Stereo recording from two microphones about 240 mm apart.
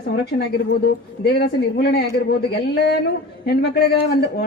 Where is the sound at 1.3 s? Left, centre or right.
Left.